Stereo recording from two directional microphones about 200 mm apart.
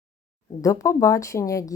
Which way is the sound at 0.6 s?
15° left (ahead or behind).